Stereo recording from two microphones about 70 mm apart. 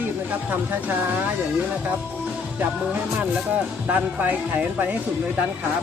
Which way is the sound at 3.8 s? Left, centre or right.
Right.